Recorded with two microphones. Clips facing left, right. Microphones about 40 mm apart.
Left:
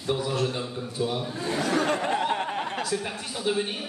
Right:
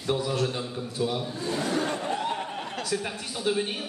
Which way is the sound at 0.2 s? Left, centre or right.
Left.